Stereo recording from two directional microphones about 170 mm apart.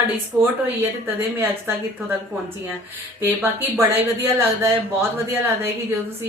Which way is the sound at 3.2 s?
15° right (ahead or behind).